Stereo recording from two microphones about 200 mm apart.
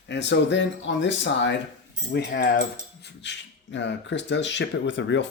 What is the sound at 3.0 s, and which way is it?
Speech, 60° left (ahead or behind).